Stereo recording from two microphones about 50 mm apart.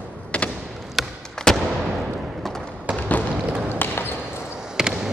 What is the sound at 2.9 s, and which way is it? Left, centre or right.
Fireworks, left.